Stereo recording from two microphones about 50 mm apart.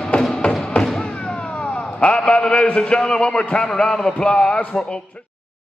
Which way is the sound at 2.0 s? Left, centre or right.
Centre.